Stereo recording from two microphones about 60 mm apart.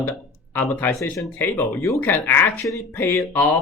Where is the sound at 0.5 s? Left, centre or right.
Left.